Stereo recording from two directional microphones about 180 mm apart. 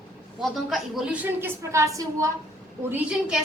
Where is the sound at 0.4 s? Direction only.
Centre (ahead or behind); by 2.3 s 15° right (ahead or behind).